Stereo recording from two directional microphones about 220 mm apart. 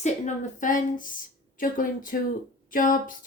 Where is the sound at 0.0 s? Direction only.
35° left (ahead or behind).